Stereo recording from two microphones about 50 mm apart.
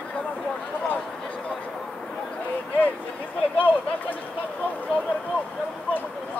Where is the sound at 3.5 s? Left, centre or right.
Left.